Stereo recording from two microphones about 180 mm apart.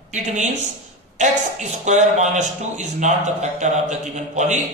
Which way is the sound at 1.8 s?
40° right (ahead or behind).